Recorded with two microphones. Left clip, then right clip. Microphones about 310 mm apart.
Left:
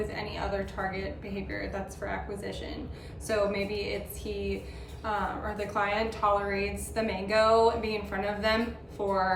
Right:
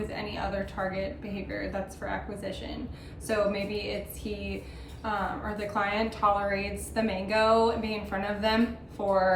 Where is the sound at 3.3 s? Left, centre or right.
Centre.